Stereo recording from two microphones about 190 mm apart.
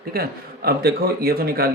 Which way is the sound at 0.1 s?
55° right (ahead or behind).